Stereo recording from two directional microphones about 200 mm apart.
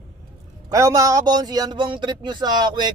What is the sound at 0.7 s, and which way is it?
A man's voice, 15° right (ahead or behind).